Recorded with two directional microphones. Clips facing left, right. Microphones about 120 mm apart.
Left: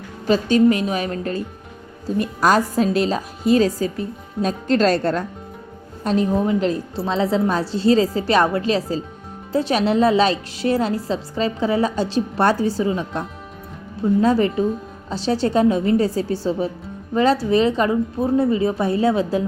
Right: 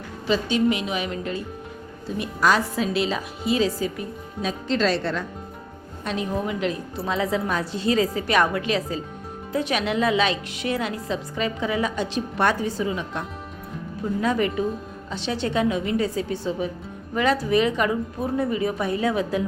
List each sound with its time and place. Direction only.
0.3 s a woman's voice: 45° left (ahead or behind)
6.1 s a woman's voice: 35° left (ahead or behind)